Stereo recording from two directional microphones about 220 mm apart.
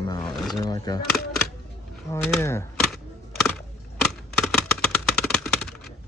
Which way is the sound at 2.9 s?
Centre (ahead or behind).